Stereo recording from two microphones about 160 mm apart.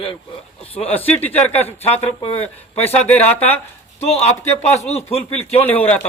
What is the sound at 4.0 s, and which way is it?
Speech, 40° left (ahead or behind).